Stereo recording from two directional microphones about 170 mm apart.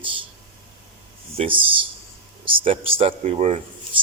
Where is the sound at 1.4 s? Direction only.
30° right (ahead or behind).